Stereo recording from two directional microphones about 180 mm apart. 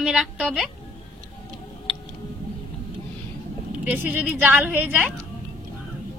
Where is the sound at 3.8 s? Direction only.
10° right (ahead or behind).